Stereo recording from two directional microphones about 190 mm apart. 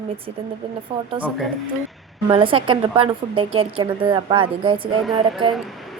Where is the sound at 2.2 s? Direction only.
25° right (ahead or behind).